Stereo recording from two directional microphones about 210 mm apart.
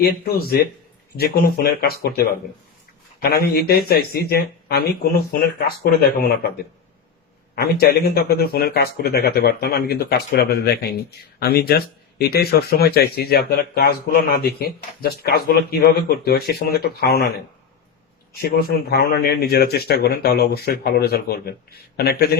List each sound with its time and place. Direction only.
0.0 s speech: 45° left (ahead or behind)
7.5 s speech: 50° left (ahead or behind)
18.5 s speech: 50° left (ahead or behind)